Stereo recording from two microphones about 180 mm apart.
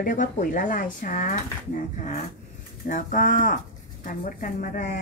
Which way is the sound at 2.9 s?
50° left (ahead or behind).